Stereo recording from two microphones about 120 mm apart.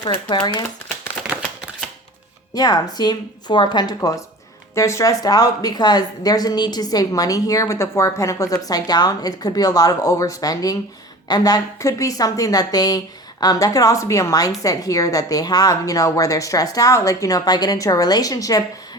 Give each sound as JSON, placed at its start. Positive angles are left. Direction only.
{"t": 0.0, "sound": "a woman's voice", "side_deg": 40}
{"t": 2.6, "sound": "a woman's voice", "side_deg": 35}